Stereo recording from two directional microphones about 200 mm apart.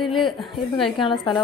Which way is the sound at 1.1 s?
25° left (ahead or behind).